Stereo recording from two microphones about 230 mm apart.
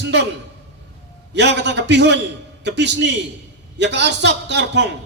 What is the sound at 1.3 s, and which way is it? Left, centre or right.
A man's voice, right.